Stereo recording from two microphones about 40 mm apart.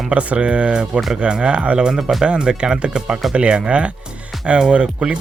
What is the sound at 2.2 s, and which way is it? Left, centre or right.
Speech, right.